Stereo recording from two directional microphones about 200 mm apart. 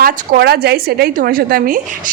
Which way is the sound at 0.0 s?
50° right (ahead or behind).